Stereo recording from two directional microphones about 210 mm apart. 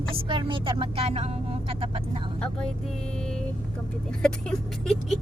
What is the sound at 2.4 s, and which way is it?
Speech, 5° left (ahead or behind).